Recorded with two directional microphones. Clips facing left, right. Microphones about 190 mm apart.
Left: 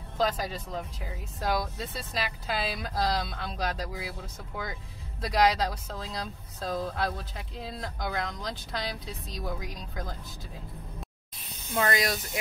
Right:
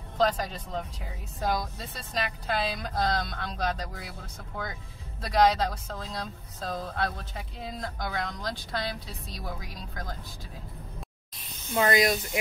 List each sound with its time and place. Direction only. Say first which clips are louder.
0.2 s speech: right 2 dB; centre (ahead or behind)
5.3 s speech: right 2 dB; 5° left (ahead or behind)
11.7 s speech: right 4 dB; 20° right (ahead or behind)